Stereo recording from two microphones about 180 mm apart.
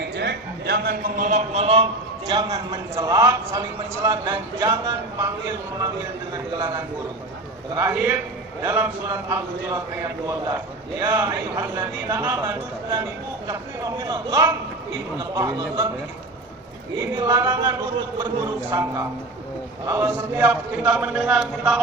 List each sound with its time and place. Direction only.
0.0 s a man's voice: 65° right (ahead or behind); by 15.9 s 20° right (ahead or behind)
17.2 s a man's voice: 20° right (ahead or behind); by 21.8 s 5° right (ahead or behind)